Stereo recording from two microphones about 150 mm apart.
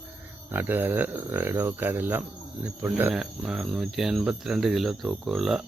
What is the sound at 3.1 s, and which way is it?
Cricket, centre (ahead or behind).